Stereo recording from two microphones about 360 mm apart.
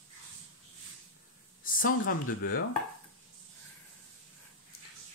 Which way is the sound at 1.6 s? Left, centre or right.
Left.